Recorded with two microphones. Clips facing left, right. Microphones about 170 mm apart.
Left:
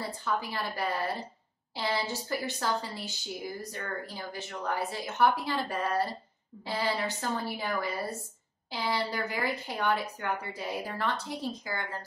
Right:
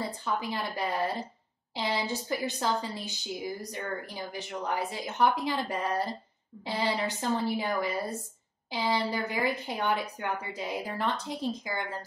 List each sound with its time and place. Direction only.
0.0 s a woman's voice: 20° right (ahead or behind)